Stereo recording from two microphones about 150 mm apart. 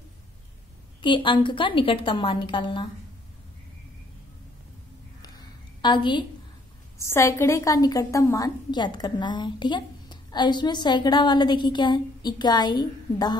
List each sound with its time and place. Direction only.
1.0 s a woman's voice: 30° left (ahead or behind)
5.2 s a sound: 30° left (ahead or behind)
7.0 s a woman's voice: 20° left (ahead or behind)